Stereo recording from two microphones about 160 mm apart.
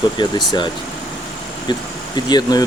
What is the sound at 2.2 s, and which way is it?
Speech, 25° left (ahead or behind).